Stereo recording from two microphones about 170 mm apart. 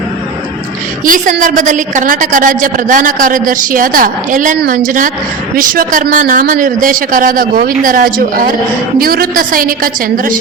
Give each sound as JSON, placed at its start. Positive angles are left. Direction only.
{"t": 1.0, "sound": "a woman's voice", "side_deg": -50}